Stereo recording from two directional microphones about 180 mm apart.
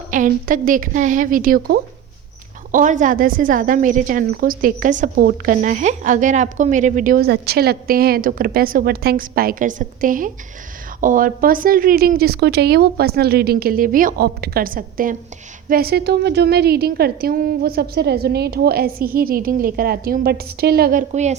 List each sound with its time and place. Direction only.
0.1 s a woman's voice: 45° right (ahead or behind)
2.7 s a woman's voice: 45° right (ahead or behind)
4.3 s a woman's voice: 55° right (ahead or behind)
21.1 s a woman's voice: 40° right (ahead or behind)